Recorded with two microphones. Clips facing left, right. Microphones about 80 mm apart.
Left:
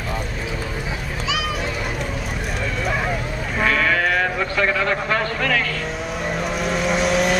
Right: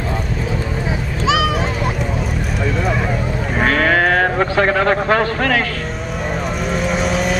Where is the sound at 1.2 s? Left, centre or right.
Right.